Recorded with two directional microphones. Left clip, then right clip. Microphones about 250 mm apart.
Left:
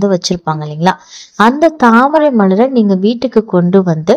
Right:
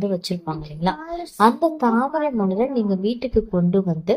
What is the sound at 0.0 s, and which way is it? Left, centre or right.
A woman's voice, left.